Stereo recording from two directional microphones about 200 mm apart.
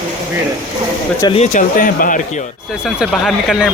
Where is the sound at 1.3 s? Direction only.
40° left (ahead or behind).